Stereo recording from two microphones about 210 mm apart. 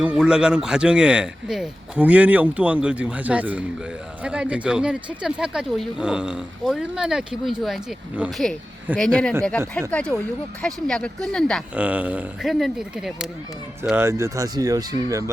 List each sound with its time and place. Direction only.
0.0 s speech: 5° right (ahead or behind)